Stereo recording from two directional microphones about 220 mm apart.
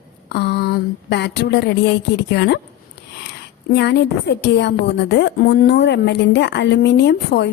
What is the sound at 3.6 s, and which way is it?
A woman's voice, 50° left (ahead or behind).